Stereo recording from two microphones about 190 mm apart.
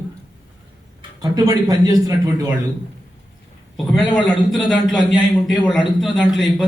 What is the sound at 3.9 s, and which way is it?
A man's voice, centre (ahead or behind).